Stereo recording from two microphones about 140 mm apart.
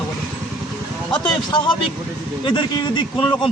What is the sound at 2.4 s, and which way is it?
Speech, 35° left (ahead or behind).